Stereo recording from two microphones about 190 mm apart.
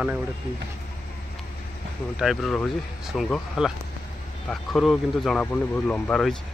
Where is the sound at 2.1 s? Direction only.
Centre (ahead or behind).